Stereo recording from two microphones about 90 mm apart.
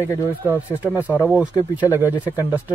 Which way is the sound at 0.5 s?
20° right (ahead or behind).